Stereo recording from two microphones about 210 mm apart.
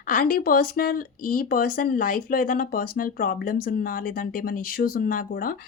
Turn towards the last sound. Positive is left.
turn(degrees=40)  # may be behind; listen again after turning